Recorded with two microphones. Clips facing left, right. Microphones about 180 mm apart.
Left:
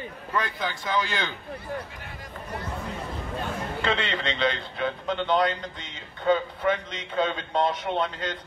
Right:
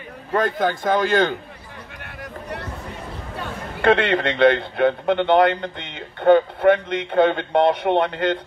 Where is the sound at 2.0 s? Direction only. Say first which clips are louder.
Right 5 dB; 65° right (ahead or behind).